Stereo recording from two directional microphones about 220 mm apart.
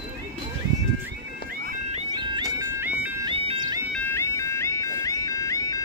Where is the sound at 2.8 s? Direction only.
5° right (ahead or behind).